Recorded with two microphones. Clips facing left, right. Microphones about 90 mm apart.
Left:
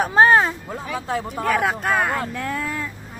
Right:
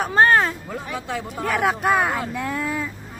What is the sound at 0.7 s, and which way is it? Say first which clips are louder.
Speech: left 2 dB; 35° left (ahead or behind).